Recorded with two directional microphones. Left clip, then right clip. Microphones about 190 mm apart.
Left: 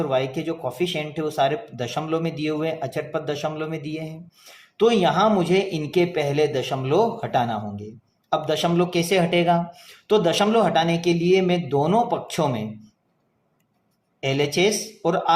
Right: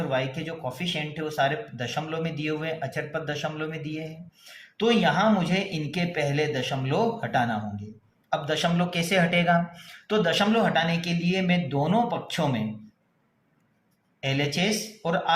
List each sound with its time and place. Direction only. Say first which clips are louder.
0.1 s speech: left 5 dB; 40° left (ahead or behind); by 9.6 s 25° left (ahead or behind)
10.1 s speech: left 5 dB; 40° left (ahead or behind)
14.2 s speech: left 6 dB; 40° left (ahead or behind)